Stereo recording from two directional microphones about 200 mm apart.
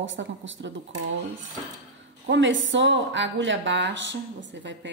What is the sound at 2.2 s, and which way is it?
A woman's voice, 65° right (ahead or behind).